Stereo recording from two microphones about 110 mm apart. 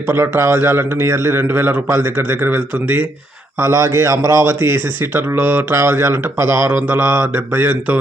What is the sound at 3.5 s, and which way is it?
Speech, 25° right (ahead or behind).